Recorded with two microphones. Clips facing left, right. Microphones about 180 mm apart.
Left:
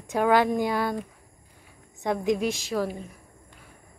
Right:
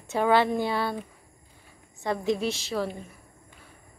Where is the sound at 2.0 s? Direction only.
15° left (ahead or behind).